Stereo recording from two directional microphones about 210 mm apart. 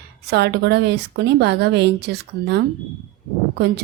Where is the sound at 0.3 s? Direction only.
50° right (ahead or behind).